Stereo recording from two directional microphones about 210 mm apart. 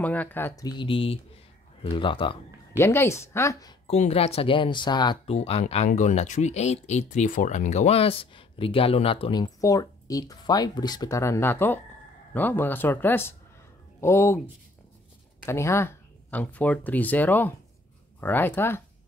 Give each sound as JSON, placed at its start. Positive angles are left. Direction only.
{"t": 0.0, "sound": "speech", "side_deg": 5}
{"t": 2.8, "sound": "speech", "side_deg": 10}
{"t": 3.8, "sound": "speech", "side_deg": 30}
{"t": 15.4, "sound": "speech", "side_deg": 15}